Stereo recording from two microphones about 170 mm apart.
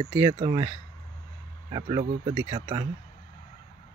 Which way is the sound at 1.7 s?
25° right (ahead or behind).